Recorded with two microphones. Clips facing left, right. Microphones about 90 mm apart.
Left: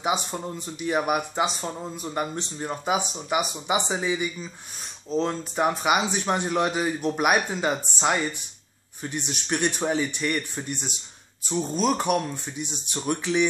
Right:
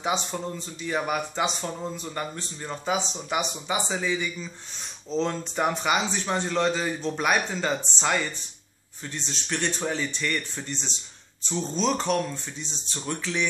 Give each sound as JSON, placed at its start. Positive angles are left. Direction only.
{"t": 0.0, "sound": "a man's voice", "side_deg": 10}
{"t": 5.1, "sound": "a man's voice", "side_deg": 5}